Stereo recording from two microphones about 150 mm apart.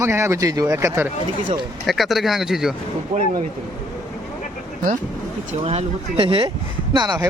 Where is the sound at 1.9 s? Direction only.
Centre (ahead or behind).